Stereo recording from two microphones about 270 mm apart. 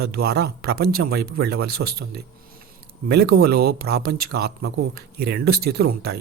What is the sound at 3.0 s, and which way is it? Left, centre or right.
Speech, right.